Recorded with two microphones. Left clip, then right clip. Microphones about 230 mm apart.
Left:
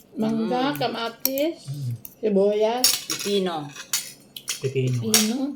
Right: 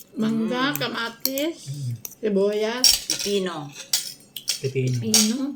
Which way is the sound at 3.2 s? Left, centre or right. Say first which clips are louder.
Even; centre.